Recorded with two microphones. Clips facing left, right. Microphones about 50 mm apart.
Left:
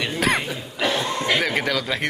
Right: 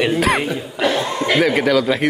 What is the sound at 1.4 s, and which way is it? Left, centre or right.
Speech, centre.